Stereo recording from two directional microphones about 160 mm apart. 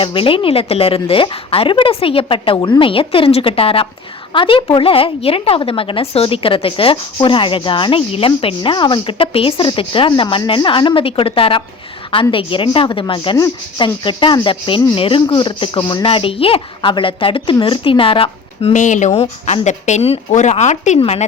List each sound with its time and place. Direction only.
0.0 s a woman's voice: 35° left (ahead or behind)
18.7 s a woman's voice: 50° left (ahead or behind)